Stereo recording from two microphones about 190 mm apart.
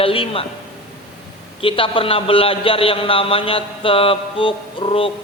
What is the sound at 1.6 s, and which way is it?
A man's voice, 30° left (ahead or behind).